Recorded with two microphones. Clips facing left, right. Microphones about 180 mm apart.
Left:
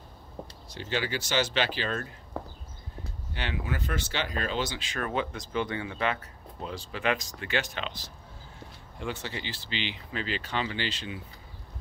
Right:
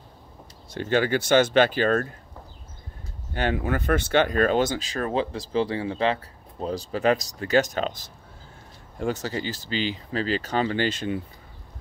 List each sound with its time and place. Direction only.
0.7 s speech: 55° right (ahead or behind)
2.3 s horse: 75° left (ahead or behind)
3.3 s speech: 50° right (ahead or behind)